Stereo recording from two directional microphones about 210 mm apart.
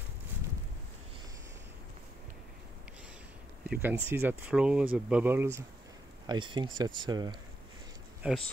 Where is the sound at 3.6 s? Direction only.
10° right (ahead or behind).